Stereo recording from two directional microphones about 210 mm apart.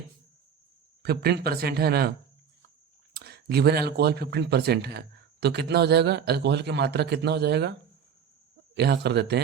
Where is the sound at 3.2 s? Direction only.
50° right (ahead or behind).